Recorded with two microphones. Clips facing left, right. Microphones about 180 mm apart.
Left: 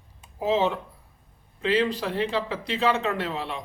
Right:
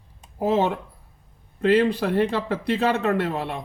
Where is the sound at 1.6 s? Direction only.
55° right (ahead or behind).